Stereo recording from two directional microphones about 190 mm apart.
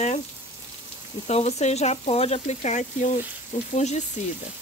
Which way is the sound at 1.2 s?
35° left (ahead or behind).